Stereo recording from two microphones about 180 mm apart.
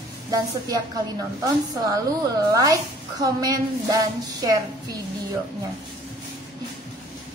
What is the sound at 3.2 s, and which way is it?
Speech, 20° right (ahead or behind).